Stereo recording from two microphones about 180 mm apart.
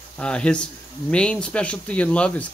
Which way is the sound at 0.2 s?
5° left (ahead or behind).